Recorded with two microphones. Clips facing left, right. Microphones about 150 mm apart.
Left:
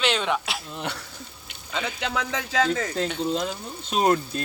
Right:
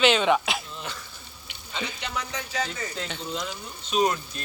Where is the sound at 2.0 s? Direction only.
90° left.